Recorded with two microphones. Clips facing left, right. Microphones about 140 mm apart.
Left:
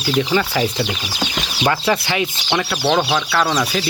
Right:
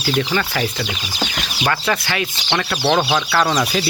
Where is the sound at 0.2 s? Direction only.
10° left (ahead or behind).